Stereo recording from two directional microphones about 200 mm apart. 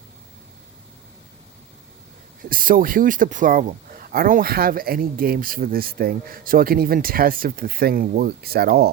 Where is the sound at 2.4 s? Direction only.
45° right (ahead or behind).